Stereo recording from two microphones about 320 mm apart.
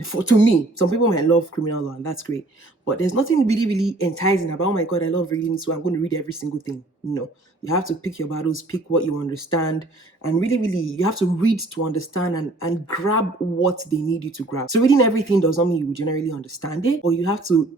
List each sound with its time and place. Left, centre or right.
0.0 s speech: left